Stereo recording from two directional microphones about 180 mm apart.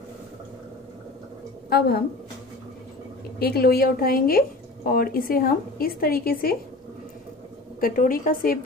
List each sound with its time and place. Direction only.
1.7 s a woman's voice: 60° left (ahead or behind)
3.3 s a woman's voice: 60° left (ahead or behind)
7.8 s a woman's voice: 50° left (ahead or behind)